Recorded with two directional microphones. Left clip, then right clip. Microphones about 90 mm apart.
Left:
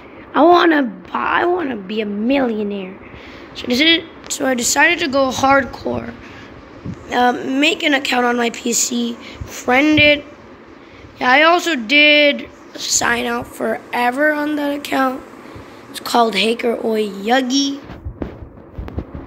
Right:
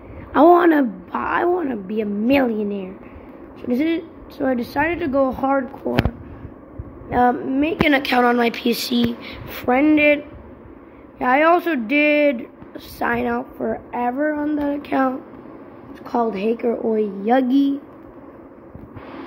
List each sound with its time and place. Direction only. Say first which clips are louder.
0.3 s a woman's voice: left 2 dB; 10° right (ahead or behind)
5.4 s speech: left 7 dB; 35° left (ahead or behind)
7.1 s speech: left 2 dB; 5° right (ahead or behind)
7.3 s a woman's voice: left 5 dB; 15° left (ahead or behind)
7.8 s speech: even; 25° right (ahead or behind); by 9.7 s 10° right (ahead or behind)
9.7 s a woman's voice: left 3 dB; 5° left (ahead or behind)
13.8 s a woman's voice: left 7 dB; 10° left (ahead or behind)
14.4 s a woman's voice: left 3 dB; 5° left (ahead or behind)
16.1 s a woman's voice: left 6 dB; 50° left (ahead or behind)
16.5 s a woman's voice: left 3 dB; 15° left (ahead or behind)
17.2 s speech: left 2 dB; 10° right (ahead or behind)
17.5 s a woman's voice: even; 25° right (ahead or behind)